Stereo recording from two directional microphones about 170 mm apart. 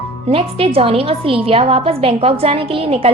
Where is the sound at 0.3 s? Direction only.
35° right (ahead or behind).